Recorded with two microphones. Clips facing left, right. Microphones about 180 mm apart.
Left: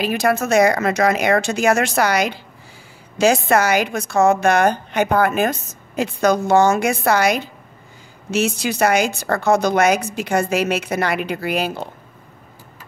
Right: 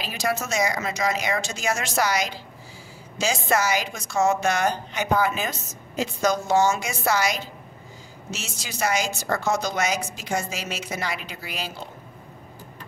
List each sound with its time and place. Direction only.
0.0 s a woman's voice: 55° left (ahead or behind)